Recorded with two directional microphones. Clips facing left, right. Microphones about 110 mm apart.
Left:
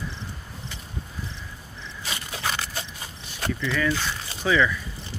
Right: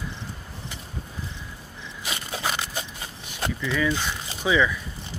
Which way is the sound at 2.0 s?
20° right (ahead or behind).